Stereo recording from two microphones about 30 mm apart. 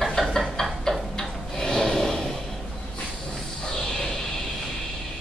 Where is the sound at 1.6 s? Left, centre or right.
Centre.